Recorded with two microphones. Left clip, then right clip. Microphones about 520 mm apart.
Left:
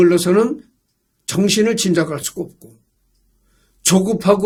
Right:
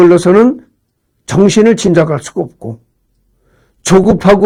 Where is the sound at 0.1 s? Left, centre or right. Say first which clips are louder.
Right 8 dB; right.